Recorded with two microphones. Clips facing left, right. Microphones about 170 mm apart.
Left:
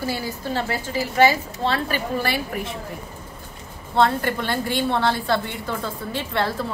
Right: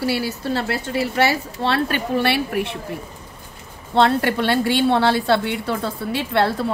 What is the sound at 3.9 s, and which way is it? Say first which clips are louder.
A woman's voice: right 3 dB; 70° right (ahead or behind).